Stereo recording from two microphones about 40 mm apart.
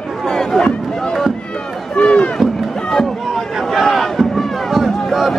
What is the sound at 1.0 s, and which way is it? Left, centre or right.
Run, centre.